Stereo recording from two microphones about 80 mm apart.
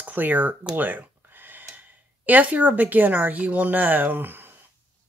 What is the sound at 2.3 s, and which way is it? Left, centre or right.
Speech, right.